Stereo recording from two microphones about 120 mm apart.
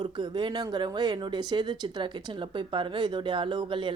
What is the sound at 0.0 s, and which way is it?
Speech, 40° right (ahead or behind).